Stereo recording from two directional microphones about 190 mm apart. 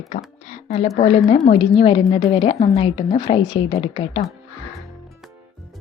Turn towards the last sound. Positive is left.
turn(degrees=30)  # may be behind; listen again after turning